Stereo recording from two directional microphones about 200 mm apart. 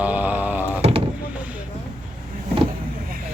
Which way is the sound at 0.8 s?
30° right (ahead or behind).